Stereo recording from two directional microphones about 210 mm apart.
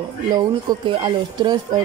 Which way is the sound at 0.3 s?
20° right (ahead or behind).